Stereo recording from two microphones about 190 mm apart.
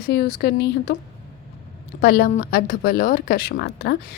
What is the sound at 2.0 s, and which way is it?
A woman's voice, 50° left (ahead or behind).